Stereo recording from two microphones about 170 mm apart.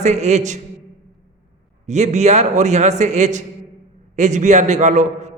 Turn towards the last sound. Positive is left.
turn(degrees=-45)  # may be behind; listen again after turning